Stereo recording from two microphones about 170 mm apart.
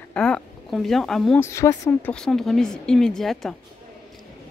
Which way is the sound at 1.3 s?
15° left (ahead or behind).